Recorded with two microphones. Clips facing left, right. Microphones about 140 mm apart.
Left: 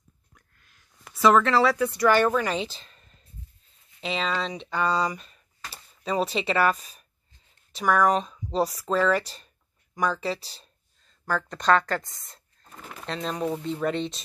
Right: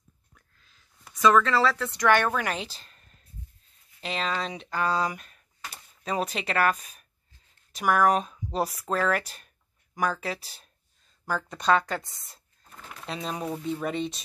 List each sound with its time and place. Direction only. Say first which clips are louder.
1.1 s speech: left 2 dB; 25° left (ahead or behind)
2.3 s speech: left 4 dB; 5° right (ahead or behind)